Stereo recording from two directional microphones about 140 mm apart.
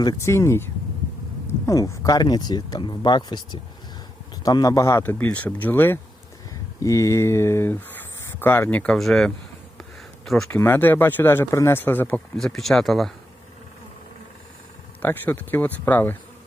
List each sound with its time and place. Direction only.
0.0 s speech: 25° left (ahead or behind); by 10.5 s centre (ahead or behind)
10.5 s speech: 15° left (ahead or behind)
15.0 s speech: 15° left (ahead or behind)